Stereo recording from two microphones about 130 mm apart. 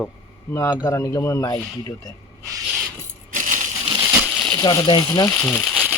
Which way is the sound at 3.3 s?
90° right.